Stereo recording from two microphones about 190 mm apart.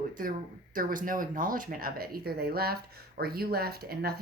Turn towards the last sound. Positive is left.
turn(degrees=-55)  # may be behind; listen again after turning